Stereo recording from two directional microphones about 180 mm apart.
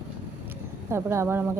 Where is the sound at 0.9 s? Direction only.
15° right (ahead or behind).